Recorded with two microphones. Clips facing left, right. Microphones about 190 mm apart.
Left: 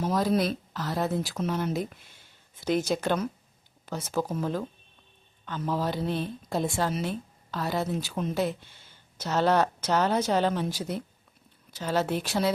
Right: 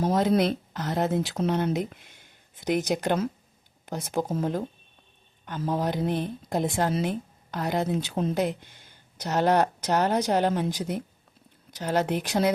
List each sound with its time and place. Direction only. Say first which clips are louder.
0.0 s a woman's voice: right 3 dB; 25° right (ahead or behind)